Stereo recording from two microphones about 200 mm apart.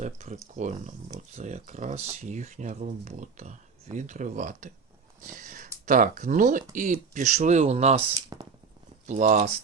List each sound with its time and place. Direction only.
0.0 s speech: 35° right (ahead or behind)
8.3 s a sound: 20° right (ahead or behind)
9.0 s speech: 35° right (ahead or behind)